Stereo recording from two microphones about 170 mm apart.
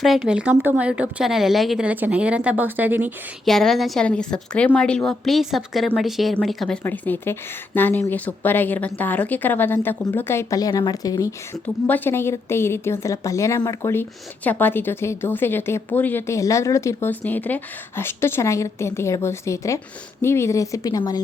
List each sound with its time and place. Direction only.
0.0 s a woman's voice: 5° right (ahead or behind)
3.4 s a woman's voice: centre (ahead or behind); by 11.3 s 20° left (ahead or behind)
11.5 s a woman's voice: 10° left (ahead or behind)